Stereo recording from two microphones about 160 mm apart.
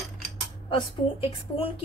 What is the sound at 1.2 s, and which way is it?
Chopping, 35° left (ahead or behind).